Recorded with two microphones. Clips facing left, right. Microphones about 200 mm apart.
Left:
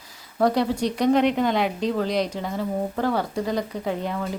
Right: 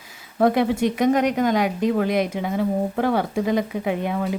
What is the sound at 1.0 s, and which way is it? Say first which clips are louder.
A woman's voice: left 1 dB; 45° right (ahead or behind).